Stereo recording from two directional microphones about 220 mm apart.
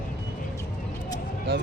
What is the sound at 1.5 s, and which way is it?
Speech, 45° right (ahead or behind).